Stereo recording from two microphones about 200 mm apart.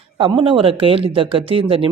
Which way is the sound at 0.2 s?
25° right (ahead or behind).